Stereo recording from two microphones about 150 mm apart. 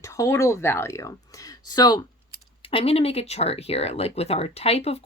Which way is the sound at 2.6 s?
40° left (ahead or behind).